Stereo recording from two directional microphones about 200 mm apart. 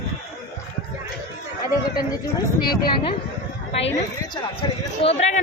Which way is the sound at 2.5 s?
50° left (ahead or behind).